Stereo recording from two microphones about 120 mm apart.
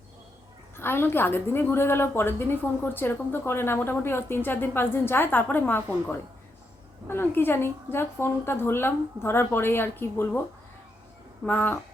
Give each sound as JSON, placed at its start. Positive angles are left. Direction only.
{"t": 0.8, "sound": "a woman's voice", "side_deg": 20}
{"t": 11.4, "sound": "speech", "side_deg": 15}